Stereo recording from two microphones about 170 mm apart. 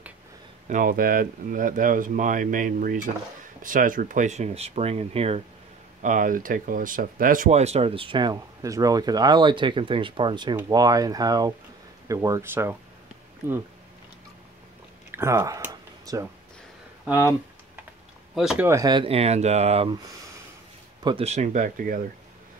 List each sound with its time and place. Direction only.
0.7 s speech: 50° right (ahead or behind); by 5.4 s 35° right (ahead or behind)
6.0 s speech: 50° right (ahead or behind); by 12.7 s 15° right (ahead or behind)
15.0 s a sound: 15° right (ahead or behind)
17.0 s speech: 15° right (ahead or behind)
18.3 s speech: centre (ahead or behind)
18.7 s speech: 20° right (ahead or behind)
21.0 s speech: 35° right (ahead or behind); by 22.0 s 50° right (ahead or behind)